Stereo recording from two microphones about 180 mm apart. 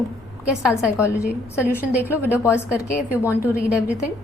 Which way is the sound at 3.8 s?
5° right (ahead or behind).